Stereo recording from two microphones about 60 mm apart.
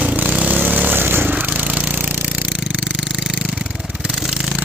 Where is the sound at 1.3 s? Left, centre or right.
Right.